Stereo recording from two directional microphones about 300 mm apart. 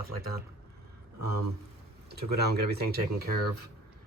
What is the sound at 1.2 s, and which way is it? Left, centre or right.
Speech, right.